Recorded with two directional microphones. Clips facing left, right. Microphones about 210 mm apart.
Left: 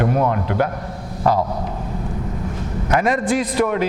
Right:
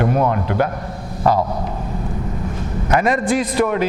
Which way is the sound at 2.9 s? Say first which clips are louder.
Right 1 dB; 15° right (ahead or behind).